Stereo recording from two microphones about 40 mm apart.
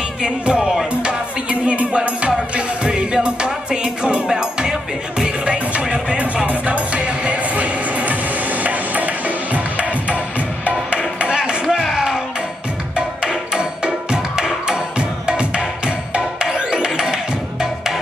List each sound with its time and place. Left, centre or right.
0.2 s speech: right
1.0 s music: right
6.4 s music: right
11.1 s music: right
11.7 s music: centre
13.3 s music: right